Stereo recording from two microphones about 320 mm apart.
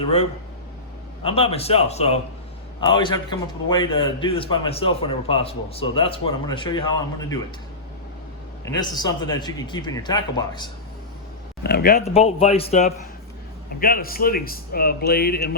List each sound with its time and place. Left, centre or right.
1.2 s speech: centre
8.6 s speech: centre
11.6 s speech: left